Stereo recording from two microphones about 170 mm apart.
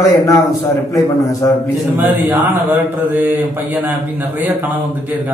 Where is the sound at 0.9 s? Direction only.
20° left (ahead or behind).